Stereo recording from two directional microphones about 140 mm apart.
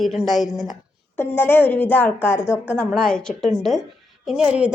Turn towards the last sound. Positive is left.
turn(degrees=-10)  # may be behind; listen again after turning